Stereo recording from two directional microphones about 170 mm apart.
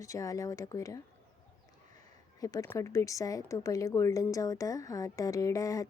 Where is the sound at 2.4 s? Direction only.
20° left (ahead or behind).